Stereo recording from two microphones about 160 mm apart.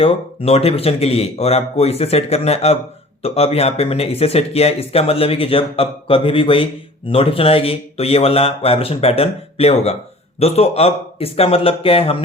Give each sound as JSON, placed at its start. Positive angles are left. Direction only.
{"t": 0.0, "sound": "speech", "side_deg": 40}